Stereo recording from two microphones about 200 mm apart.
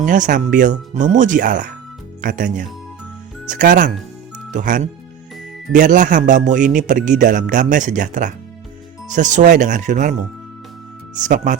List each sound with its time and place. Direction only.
0.0 s a man's voice: 40° right (ahead or behind)